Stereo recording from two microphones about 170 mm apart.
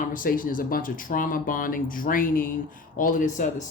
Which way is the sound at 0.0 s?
55° left (ahead or behind).